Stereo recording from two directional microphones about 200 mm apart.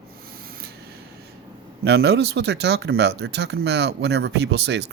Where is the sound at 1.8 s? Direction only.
55° right (ahead or behind).